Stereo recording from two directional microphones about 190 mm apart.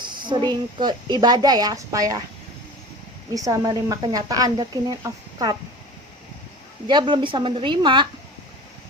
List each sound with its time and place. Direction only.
0.0 s a woman's voice: 25° right (ahead or behind)
3.3 s a woman's voice: 15° right (ahead or behind)
6.8 s a woman's voice: 25° right (ahead or behind)